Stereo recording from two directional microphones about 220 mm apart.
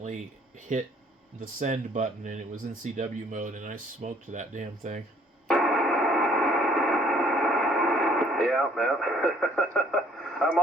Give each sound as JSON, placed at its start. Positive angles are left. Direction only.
{"t": 0.7, "sound": "speech", "side_deg": -35}
{"t": 5.5, "sound": "radio", "side_deg": 0}